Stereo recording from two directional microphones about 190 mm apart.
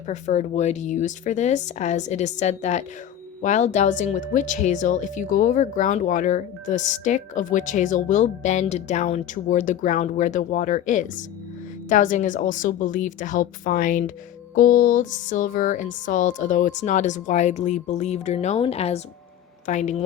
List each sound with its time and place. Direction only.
0.1 s a woman's voice: 40° left (ahead or behind)